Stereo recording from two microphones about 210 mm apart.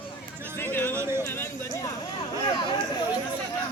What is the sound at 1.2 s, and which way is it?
Speech, 10° left (ahead or behind).